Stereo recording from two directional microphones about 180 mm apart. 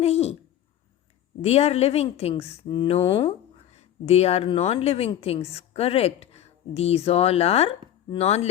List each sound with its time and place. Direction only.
0.0 s speech: 35° left (ahead or behind)
1.4 s speech: 35° left (ahead or behind)